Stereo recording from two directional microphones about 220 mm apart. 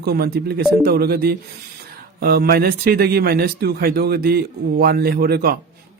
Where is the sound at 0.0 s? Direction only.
45° right (ahead or behind).